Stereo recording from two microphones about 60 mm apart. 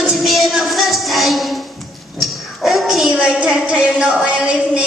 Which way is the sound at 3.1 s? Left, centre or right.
Centre.